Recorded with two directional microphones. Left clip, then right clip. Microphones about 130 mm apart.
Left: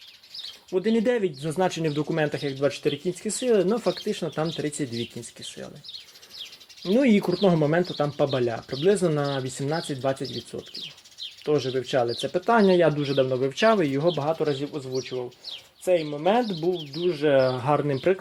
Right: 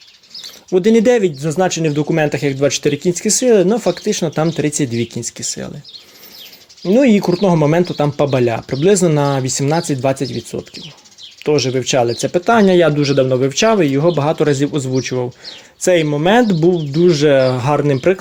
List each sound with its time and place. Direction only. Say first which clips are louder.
0.7 s speech: right 12 dB; 30° right (ahead or behind)
1.4 s speech: right 9 dB; 15° right (ahead or behind); by 5.5 s 35° right (ahead or behind)
7.0 s speech: right 9 dB; 20° right (ahead or behind)
7.6 s speech: right 9 dB; 30° right (ahead or behind)
14.6 s speech: right 12 dB; 50° right (ahead or behind)
17.3 s speech: right 8 dB; 30° right (ahead or behind)